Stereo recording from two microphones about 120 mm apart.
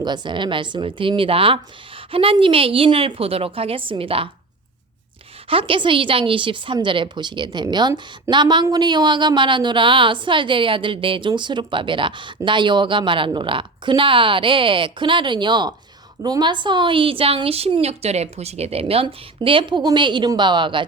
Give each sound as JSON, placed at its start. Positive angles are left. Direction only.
{"t": 0.0, "sound": "a woman's voice", "side_deg": -40}
{"t": 5.5, "sound": "a woman's voice", "side_deg": -50}